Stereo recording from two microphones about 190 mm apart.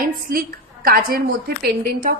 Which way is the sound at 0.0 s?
50° right (ahead or behind).